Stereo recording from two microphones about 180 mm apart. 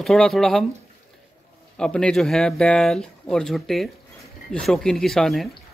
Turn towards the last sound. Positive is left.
turn(degrees=0)  # may be behind; listen again after turning